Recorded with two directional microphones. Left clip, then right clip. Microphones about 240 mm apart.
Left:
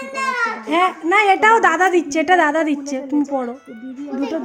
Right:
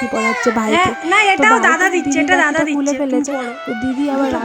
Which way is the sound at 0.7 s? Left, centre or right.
Centre.